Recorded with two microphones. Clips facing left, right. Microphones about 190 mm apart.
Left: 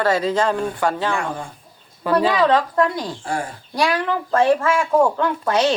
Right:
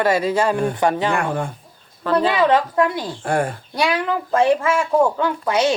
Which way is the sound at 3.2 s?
60° right (ahead or behind).